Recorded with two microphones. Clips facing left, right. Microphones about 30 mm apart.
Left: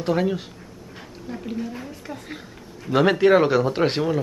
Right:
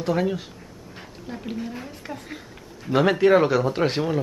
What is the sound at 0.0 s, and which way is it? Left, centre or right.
Speech, centre.